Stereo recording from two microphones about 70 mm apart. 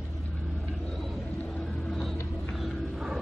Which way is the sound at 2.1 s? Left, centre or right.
Left.